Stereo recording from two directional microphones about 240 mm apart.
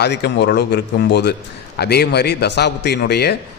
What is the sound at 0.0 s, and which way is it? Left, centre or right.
A man's voice, left.